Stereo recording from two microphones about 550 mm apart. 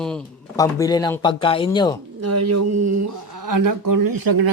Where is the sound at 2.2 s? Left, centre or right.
Right.